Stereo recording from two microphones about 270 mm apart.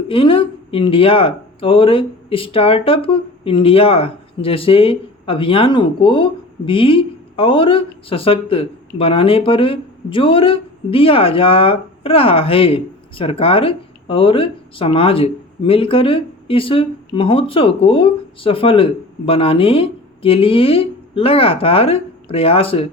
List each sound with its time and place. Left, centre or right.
0.1 s speech: centre